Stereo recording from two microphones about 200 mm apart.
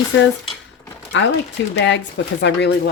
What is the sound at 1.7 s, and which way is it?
Speech, 65° left (ahead or behind).